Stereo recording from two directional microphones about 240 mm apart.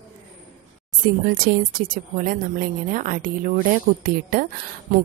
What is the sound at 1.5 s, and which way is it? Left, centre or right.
A woman's voice, right.